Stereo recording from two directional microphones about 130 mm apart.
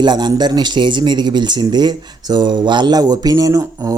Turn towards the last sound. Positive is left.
turn(degrees=-25)  # may be behind; listen again after turning